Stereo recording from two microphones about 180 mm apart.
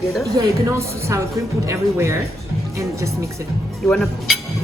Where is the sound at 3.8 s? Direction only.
5° left (ahead or behind).